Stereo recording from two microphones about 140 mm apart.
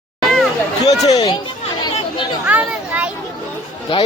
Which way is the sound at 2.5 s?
10° right (ahead or behind).